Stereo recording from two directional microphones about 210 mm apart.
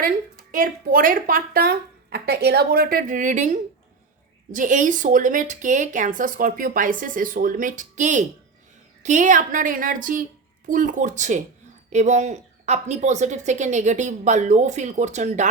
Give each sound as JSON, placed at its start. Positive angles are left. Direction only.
{"t": 0.5, "sound": "a woman's voice", "side_deg": -40}